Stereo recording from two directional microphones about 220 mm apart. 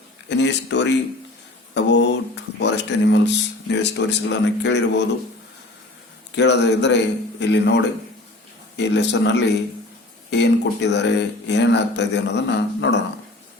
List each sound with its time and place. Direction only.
0.3 s speech: 55° left (ahead or behind)
6.3 s speech: 50° left (ahead or behind)